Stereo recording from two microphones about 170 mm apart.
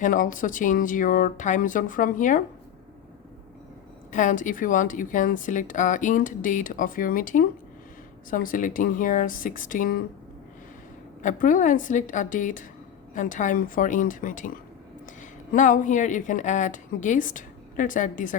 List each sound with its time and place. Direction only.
0.0 s speech: 50° left (ahead or behind)
4.1 s speech: 50° left (ahead or behind)
11.2 s speech: 50° left (ahead or behind)